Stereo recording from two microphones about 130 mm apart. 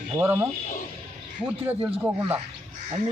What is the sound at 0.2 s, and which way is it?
Speech, 20° right (ahead or behind).